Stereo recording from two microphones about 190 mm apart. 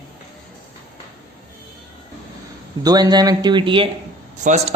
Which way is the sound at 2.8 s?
20° right (ahead or behind).